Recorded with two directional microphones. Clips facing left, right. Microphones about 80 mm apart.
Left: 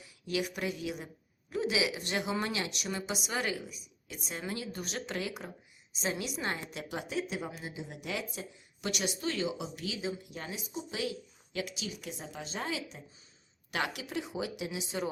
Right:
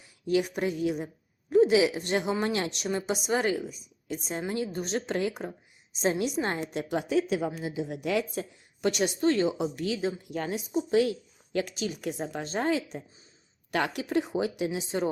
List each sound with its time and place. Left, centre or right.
0.3 s a woman's voice: right
2.4 s a woman's voice: right
7.1 s a woman's voice: right
8.9 s speech: right
14.7 s a woman's voice: right